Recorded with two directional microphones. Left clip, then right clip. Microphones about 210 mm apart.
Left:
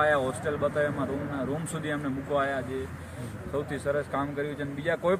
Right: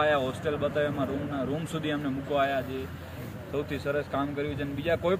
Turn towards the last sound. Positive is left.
turn(degrees=15)  # may be behind; listen again after turning